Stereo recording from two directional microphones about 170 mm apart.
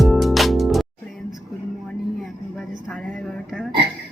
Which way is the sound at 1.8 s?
Centre (ahead or behind).